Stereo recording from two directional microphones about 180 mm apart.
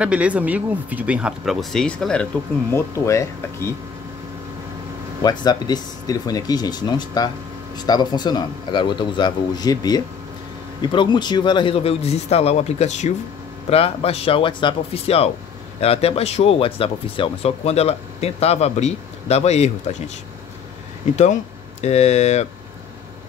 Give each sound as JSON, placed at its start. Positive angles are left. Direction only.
{"t": 0.0, "sound": "speech", "side_deg": -5}
{"t": 2.7, "sound": "speech", "side_deg": 15}
{"t": 5.2, "sound": "speech", "side_deg": 25}
{"t": 21.8, "sound": "speech", "side_deg": 40}